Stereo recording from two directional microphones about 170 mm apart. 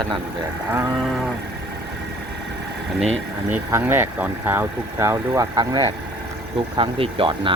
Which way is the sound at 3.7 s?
15° right (ahead or behind).